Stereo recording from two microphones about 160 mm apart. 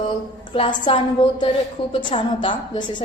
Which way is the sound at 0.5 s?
35° left (ahead or behind).